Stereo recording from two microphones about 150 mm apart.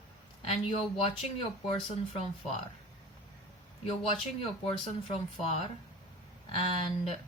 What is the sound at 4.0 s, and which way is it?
Speech, 35° left (ahead or behind).